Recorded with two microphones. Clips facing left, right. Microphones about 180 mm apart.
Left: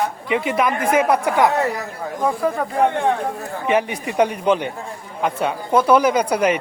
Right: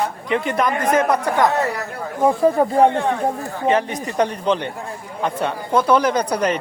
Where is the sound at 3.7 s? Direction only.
10° left (ahead or behind).